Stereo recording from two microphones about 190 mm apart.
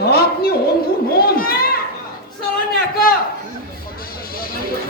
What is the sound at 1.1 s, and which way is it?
Children playing, 50° left (ahead or behind).